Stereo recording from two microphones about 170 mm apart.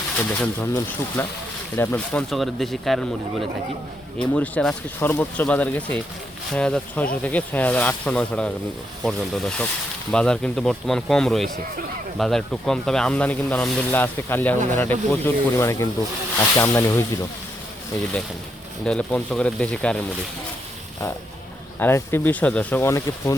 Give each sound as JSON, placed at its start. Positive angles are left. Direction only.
{"t": 0.6, "sound": "speech", "side_deg": 15}
{"t": 2.3, "sound": "speech", "side_deg": 0}
{"t": 4.2, "sound": "speech", "side_deg": 5}
{"t": 18.9, "sound": "speech", "side_deg": 5}
{"t": 21.8, "sound": "speech", "side_deg": 15}